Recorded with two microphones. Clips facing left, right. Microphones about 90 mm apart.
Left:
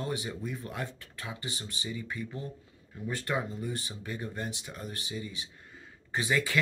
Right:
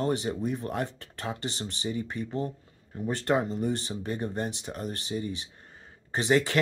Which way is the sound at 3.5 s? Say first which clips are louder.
Right 7 dB; 60° right (ahead or behind).